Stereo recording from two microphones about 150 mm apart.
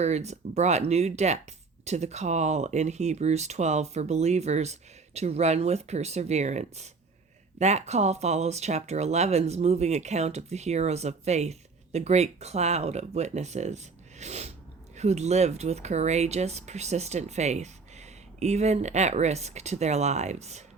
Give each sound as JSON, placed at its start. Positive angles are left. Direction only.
{"t": 0.0, "sound": "speech", "side_deg": -50}